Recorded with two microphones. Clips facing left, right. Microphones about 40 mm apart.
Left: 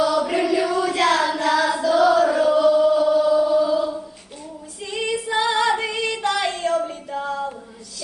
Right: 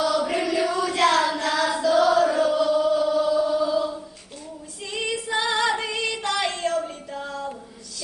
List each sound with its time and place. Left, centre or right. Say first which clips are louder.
0.0 s choir: left 3 dB; centre
4.9 s female singing: left 3 dB; centre